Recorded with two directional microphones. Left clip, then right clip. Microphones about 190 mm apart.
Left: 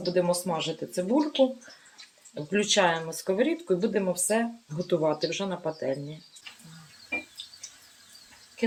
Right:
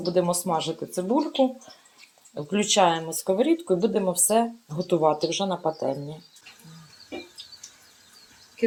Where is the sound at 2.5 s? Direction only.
25° right (ahead or behind).